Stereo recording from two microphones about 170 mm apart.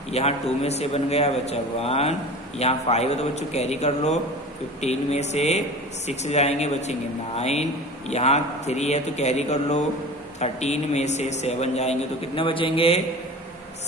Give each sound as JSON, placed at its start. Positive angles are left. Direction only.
{"t": 0.1, "sound": "a man's voice", "side_deg": 40}